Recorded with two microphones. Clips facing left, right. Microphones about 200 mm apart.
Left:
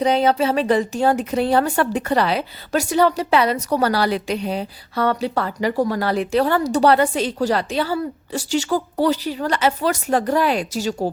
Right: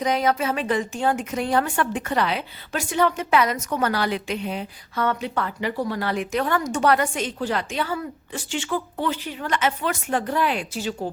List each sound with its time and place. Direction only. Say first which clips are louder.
0.0 s a woman's voice: left 5 dB; 30° left (ahead or behind)